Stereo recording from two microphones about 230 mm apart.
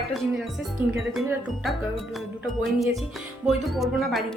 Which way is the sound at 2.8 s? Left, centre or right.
Centre.